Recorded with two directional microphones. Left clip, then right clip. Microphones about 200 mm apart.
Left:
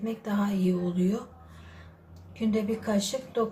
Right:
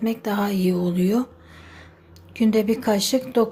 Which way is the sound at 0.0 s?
50° right (ahead or behind).